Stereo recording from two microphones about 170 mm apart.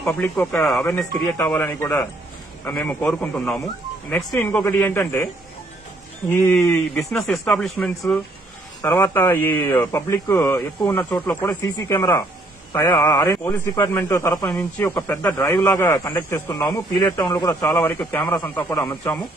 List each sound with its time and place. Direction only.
0.0 s a man's voice: 10° left (ahead or behind)
8.8 s a man's voice: 15° left (ahead or behind)